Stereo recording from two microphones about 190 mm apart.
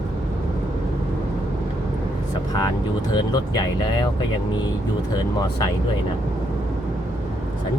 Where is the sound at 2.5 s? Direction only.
20° left (ahead or behind).